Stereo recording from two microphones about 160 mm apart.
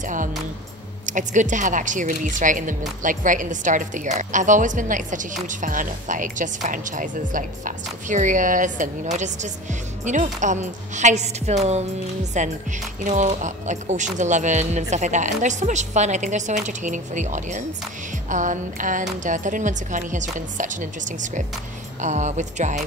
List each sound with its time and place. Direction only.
0.0 s a woman's voice: 55° right (ahead or behind)